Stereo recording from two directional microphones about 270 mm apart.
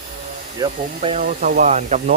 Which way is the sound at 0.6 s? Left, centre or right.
Right.